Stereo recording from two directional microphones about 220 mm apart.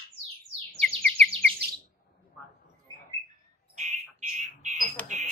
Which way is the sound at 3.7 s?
30° right (ahead or behind).